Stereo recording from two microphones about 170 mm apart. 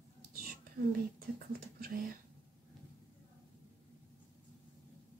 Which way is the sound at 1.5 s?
60° right (ahead or behind).